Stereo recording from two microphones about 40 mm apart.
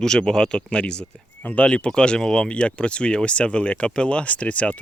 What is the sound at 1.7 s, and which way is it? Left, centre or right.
Speech, left.